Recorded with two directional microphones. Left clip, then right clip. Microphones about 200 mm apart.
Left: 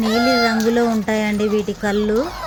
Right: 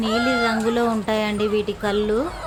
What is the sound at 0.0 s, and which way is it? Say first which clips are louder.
Speech: left 4 dB; 10° left (ahead or behind).